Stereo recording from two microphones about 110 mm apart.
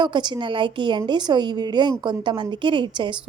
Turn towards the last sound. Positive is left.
turn(degrees=-45)  # may be behind; listen again after turning